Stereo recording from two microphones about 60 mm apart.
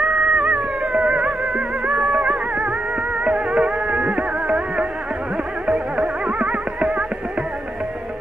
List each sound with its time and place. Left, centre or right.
0.0 s music: centre